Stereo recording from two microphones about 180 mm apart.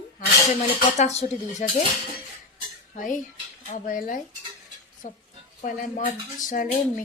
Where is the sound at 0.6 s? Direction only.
35° left (ahead or behind).